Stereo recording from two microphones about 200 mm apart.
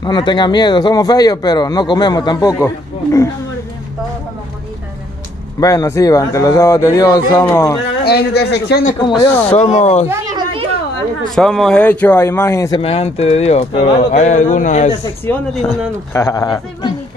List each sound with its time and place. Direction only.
0.0 s speech: 20° left (ahead or behind)
5.6 s speech: 15° left (ahead or behind)
8.0 s a man's voice: 55° left (ahead or behind)
9.5 s speech: 30° left (ahead or behind)
10.0 s a sound: 20° right (ahead or behind)
11.2 s speech: centre (ahead or behind)
12.8 s speech: 30° left (ahead or behind)
15.5 s speech: centre (ahead or behind)
16.1 s speech: 15° left (ahead or behind)